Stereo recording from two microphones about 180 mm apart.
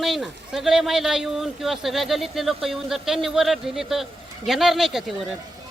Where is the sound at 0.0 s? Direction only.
Centre (ahead or behind).